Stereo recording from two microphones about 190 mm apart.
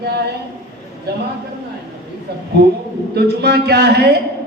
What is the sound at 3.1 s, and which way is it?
Speech, 60° right (ahead or behind).